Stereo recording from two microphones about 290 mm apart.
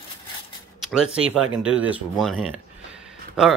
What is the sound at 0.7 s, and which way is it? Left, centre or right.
Speech, centre.